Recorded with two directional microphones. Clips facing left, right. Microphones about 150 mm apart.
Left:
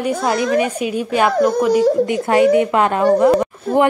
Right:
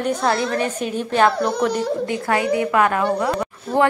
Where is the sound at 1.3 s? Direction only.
45° left (ahead or behind).